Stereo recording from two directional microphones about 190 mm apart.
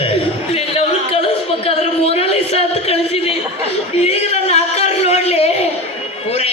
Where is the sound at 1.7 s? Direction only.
30° left (ahead or behind).